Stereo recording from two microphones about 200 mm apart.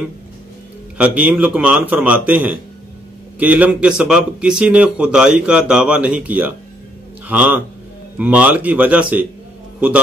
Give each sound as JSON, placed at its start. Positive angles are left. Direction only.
{"t": 0.9, "sound": "a man's voice", "side_deg": -5}